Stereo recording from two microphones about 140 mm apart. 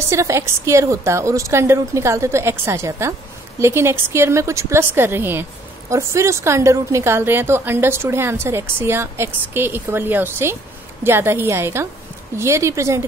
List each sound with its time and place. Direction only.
0.1 s a woman's voice: 20° right (ahead or behind)